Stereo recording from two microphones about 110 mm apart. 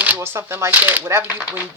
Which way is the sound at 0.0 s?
20° right (ahead or behind).